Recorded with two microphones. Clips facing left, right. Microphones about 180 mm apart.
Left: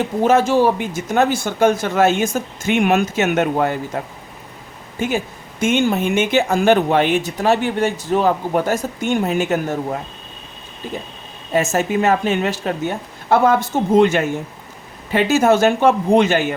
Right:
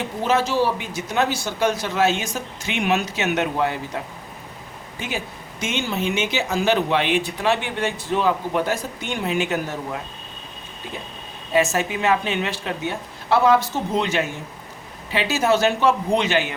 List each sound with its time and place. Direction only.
0.2 s speech: 50° left (ahead or behind)
11.5 s speech: 45° left (ahead or behind)